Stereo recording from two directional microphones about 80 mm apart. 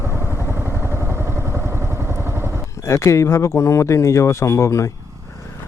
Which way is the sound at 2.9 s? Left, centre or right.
Left.